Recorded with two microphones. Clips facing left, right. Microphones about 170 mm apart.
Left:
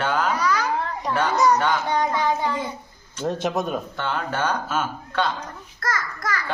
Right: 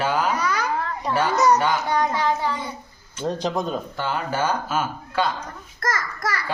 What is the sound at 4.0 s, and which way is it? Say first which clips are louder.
Speech: right 2 dB; 5° right (ahead or behind).